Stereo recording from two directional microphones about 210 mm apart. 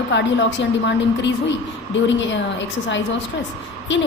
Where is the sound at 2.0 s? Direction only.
60° left (ahead or behind).